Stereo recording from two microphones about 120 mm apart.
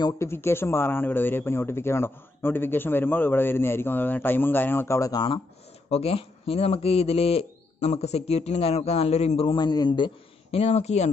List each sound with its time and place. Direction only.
0.2 s speech: 20° left (ahead or behind)
5.9 s speech: 55° left (ahead or behind)
9.6 s a man's voice: 35° left (ahead or behind)
10.6 s speech: 65° left (ahead or behind)